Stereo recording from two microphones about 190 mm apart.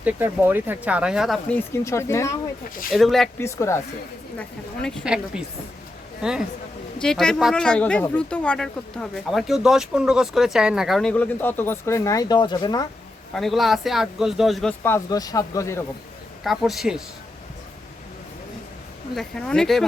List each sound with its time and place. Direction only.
0.0 s speech: 10° right (ahead or behind); by 2.3 s 15° left (ahead or behind)
2.9 s speech: centre (ahead or behind)
3.4 s speech: 15° left (ahead or behind)
4.4 s speech: 5° left (ahead or behind)
7.0 s speech: 5° left (ahead or behind); by 12.9 s 20° left (ahead or behind)
13.3 s speech: centre (ahead or behind)
14.8 s speech: 15° left (ahead or behind)
16.4 s speech: centre (ahead or behind)
19.1 s speech: centre (ahead or behind)